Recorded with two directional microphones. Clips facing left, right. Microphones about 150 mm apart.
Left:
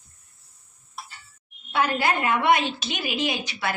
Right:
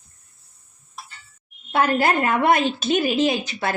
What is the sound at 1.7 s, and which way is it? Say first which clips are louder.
A woman's voice: right 4 dB; 50° right (ahead or behind).